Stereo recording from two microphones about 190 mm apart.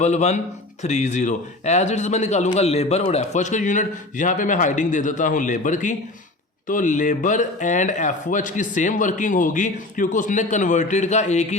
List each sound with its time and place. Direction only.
0.0 s speech: 35° left (ahead or behind)